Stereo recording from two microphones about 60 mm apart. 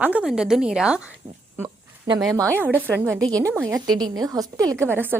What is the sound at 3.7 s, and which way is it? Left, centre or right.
A woman's voice, right.